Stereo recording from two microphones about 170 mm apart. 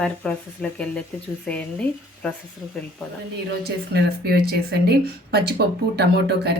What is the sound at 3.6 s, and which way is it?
A woman's voice, 70° right (ahead or behind).